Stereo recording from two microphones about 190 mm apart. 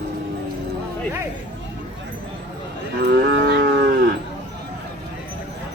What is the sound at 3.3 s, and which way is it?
Cattle, 60° right (ahead or behind).